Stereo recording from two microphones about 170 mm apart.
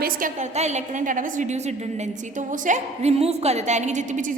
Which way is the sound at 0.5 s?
40° right (ahead or behind).